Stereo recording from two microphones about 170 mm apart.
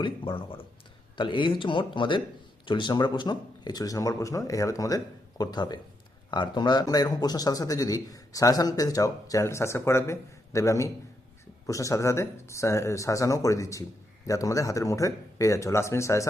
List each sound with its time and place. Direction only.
0.0 s speech: 30° left (ahead or behind)